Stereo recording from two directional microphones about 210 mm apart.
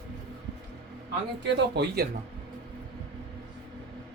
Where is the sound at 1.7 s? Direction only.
50° right (ahead or behind).